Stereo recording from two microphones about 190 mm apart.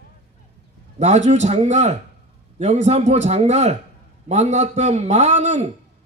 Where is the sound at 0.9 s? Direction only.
35° right (ahead or behind).